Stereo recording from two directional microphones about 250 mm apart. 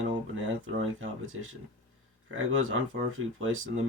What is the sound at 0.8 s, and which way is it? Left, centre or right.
Speech, right.